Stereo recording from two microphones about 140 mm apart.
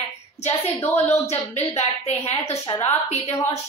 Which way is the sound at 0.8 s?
15° left (ahead or behind).